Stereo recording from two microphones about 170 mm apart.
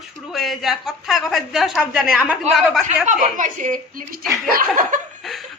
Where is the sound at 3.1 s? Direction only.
50° right (ahead or behind).